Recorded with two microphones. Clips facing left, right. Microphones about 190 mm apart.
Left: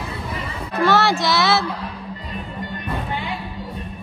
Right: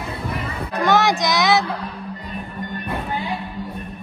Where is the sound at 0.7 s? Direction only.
15° right (ahead or behind).